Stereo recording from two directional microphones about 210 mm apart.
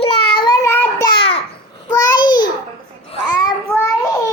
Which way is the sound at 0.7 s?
10° left (ahead or behind).